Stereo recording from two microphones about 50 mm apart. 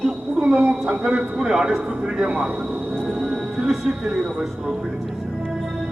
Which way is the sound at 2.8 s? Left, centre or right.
Right.